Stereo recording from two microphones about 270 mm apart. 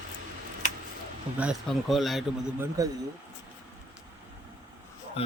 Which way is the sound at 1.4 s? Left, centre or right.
Centre.